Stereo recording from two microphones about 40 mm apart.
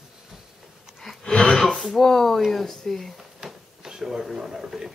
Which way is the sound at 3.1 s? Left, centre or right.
Centre.